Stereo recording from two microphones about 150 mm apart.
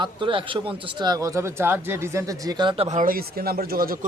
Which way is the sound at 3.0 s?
75° right (ahead or behind).